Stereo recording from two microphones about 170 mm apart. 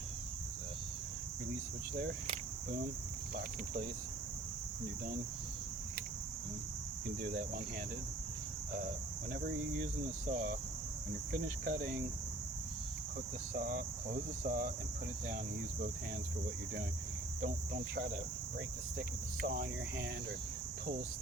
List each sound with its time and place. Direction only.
7.2 s cricket: 60° right (ahead or behind)
10.2 s cricket: 75° right (ahead or behind)
11.3 s speech: 50° right (ahead or behind)
13.5 s cricket: 55° right (ahead or behind)
18.9 s cricket: 60° right (ahead or behind)